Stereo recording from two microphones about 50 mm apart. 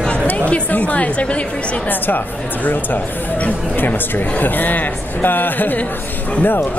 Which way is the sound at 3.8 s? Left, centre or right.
Left.